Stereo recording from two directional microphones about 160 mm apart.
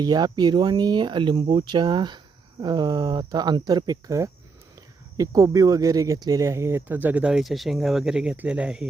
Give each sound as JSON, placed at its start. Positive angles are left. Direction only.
{"t": 0.0, "sound": "speech", "side_deg": -25}